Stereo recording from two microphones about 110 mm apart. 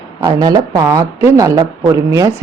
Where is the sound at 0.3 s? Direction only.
35° right (ahead or behind).